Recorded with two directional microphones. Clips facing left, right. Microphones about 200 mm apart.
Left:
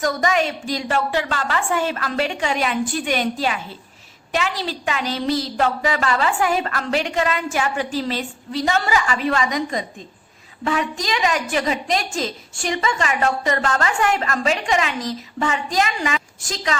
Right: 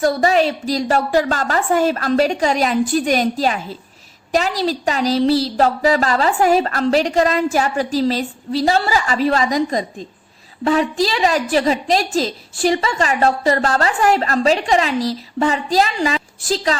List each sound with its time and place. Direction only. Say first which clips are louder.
0.0 s a woman's voice: right 5 dB; 35° right (ahead or behind)